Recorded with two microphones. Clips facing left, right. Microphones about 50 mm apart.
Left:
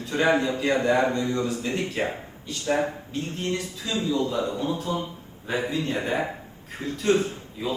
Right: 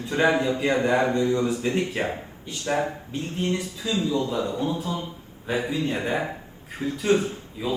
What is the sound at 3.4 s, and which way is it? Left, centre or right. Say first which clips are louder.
Speech: right 3 dB; centre.